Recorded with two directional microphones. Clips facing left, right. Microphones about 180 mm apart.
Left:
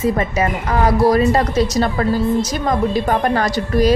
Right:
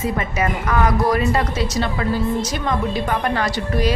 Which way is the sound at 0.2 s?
35° left (ahead or behind).